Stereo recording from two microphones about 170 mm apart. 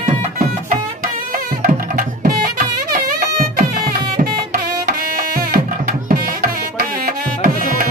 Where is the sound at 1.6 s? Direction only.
55° right (ahead or behind).